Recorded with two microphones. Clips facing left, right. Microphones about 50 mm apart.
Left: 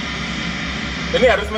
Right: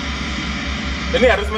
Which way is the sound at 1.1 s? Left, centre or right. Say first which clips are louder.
Even; centre.